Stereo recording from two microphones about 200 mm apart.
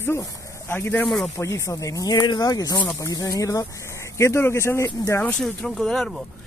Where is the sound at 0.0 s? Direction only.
10° left (ahead or behind).